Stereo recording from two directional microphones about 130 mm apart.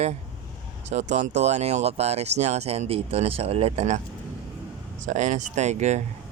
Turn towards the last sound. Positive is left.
turn(degrees=-60)  # may be behind; listen again after turning